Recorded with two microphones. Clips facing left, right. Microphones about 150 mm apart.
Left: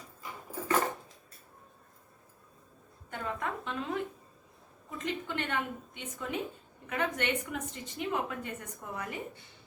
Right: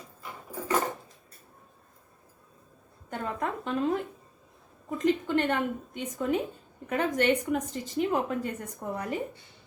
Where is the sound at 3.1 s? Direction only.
40° right (ahead or behind).